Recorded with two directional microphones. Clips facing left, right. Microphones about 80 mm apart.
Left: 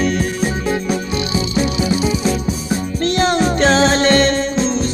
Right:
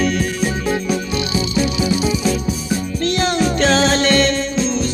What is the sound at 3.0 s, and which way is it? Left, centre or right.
Music, left.